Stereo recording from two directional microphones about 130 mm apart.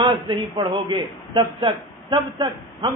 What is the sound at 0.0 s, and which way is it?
A man's voice, 40° right (ahead or behind).